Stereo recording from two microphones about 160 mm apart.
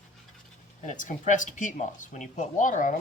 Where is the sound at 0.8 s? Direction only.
50° left (ahead or behind).